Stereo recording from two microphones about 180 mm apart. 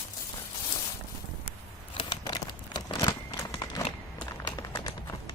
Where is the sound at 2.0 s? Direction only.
20° left (ahead or behind).